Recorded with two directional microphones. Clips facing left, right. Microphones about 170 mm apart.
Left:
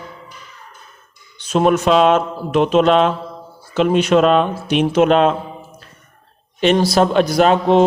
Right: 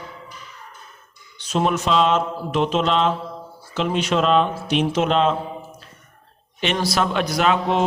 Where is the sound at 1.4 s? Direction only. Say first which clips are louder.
Left 6 dB; 55° left (ahead or behind).